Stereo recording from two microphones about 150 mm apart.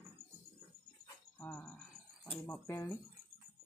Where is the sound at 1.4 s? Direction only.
10° left (ahead or behind).